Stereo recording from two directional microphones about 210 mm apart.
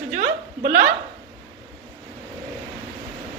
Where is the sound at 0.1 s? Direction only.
35° right (ahead or behind).